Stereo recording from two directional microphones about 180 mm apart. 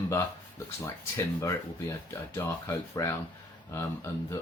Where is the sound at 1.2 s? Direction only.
15° left (ahead or behind).